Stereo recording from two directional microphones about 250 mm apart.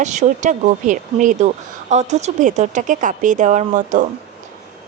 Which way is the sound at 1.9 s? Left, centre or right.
Right.